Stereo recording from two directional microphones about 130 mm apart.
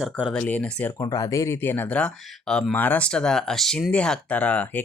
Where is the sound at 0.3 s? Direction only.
15° left (ahead or behind).